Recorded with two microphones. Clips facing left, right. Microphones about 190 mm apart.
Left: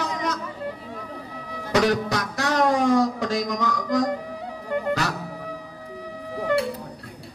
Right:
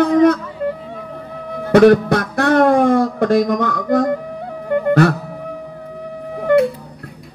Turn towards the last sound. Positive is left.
turn(degrees=-55)  # may be behind; listen again after turning